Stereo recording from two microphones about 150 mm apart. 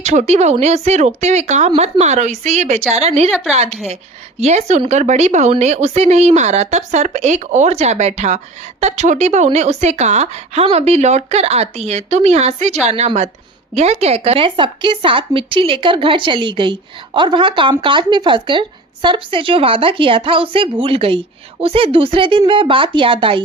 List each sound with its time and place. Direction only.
0.0 s a woman's voice: 50° right (ahead or behind)
4.4 s a woman's voice: 45° right (ahead or behind)